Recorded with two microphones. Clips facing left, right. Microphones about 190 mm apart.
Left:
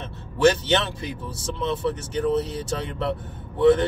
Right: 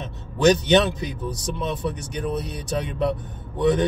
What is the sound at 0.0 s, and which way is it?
A man's voice, 15° right (ahead or behind).